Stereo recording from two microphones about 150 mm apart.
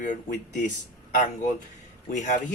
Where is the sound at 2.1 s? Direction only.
55° left (ahead or behind).